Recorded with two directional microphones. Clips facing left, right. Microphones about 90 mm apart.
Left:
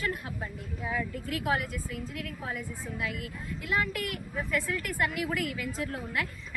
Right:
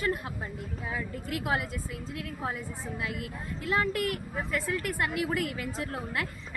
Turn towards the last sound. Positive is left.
turn(degrees=-25)  # may be behind; listen again after turning